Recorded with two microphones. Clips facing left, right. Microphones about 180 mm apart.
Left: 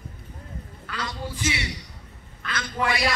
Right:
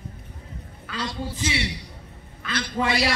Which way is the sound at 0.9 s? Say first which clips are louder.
Right 2 dB; 25° right (ahead or behind).